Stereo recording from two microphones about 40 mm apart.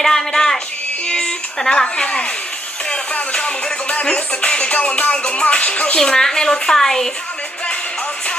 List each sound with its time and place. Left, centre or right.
0.0 s music: centre
1.0 s a sound: left
2.9 s music: left
6.0 s a woman's voice: centre